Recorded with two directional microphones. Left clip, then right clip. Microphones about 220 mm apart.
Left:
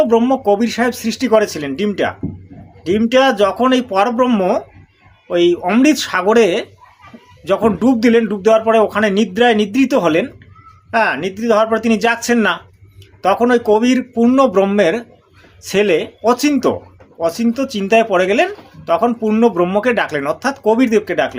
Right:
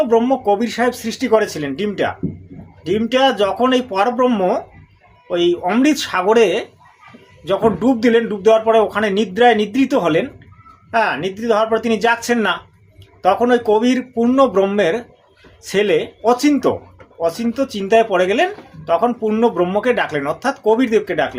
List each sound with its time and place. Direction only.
0.0 s speech: 25° left (ahead or behind)